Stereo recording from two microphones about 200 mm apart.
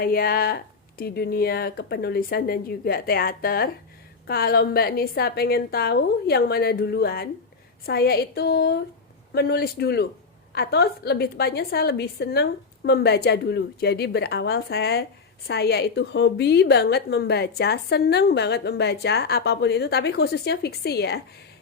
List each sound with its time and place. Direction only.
0.0 s a woman's voice: 50° left (ahead or behind)